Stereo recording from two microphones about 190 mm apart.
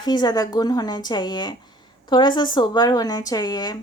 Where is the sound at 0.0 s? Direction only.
20° left (ahead or behind).